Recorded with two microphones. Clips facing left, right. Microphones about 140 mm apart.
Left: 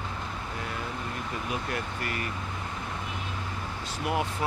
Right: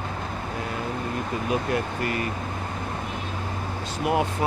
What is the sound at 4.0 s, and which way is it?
Speech, 20° right (ahead or behind).